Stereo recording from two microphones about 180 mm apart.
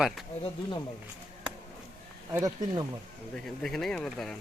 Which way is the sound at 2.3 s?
20° right (ahead or behind).